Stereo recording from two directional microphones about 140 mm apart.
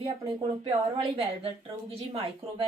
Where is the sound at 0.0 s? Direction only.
40° right (ahead or behind).